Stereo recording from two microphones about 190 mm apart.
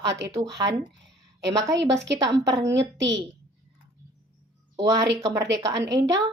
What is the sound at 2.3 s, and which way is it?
Speech, 15° right (ahead or behind).